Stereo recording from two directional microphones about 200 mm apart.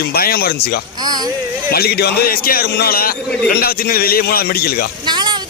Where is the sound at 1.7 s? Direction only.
50° left (ahead or behind).